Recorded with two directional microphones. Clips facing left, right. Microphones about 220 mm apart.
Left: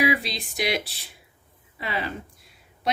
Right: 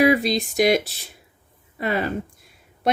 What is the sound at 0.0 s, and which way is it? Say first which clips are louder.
Speech: right 7 dB; 45° right (ahead or behind).